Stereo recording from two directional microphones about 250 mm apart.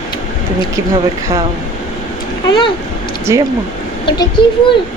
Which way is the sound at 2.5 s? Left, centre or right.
Centre.